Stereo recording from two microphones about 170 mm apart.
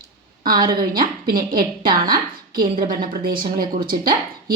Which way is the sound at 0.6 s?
55° right (ahead or behind).